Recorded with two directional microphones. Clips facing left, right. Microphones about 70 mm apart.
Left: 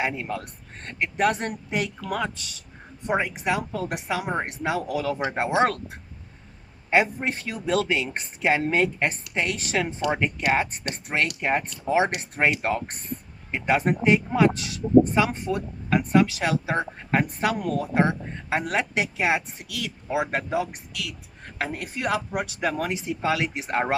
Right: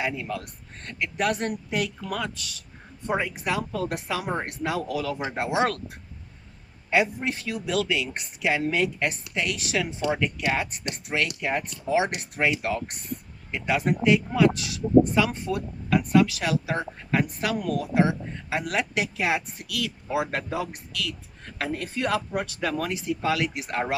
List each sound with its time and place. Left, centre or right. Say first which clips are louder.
0.0 s speech: left 2 dB; left